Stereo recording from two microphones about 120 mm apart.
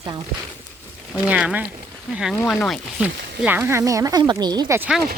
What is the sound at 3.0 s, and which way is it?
Speech, 15° right (ahead or behind).